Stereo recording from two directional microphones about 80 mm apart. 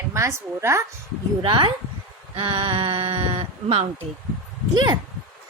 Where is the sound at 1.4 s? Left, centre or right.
Right.